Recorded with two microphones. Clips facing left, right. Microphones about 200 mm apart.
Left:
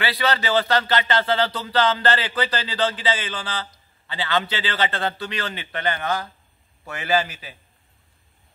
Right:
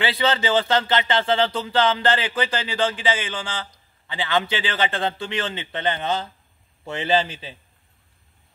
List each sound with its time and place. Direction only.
0.0 s a man's voice: 20° right (ahead or behind)